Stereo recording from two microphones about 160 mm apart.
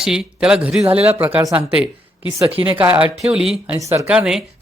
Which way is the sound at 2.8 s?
10° right (ahead or behind).